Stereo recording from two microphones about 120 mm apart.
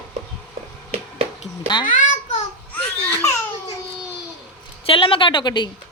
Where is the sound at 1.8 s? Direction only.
90° left.